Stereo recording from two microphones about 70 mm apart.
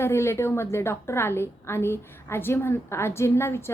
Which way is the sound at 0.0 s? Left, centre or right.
Left.